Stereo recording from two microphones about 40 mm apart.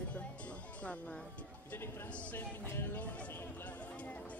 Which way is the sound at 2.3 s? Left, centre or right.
Left.